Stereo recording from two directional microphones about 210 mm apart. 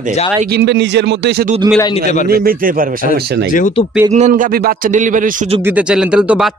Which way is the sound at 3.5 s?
35° left (ahead or behind).